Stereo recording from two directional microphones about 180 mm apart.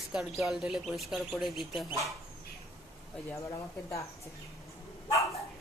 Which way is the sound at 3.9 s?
15° left (ahead or behind).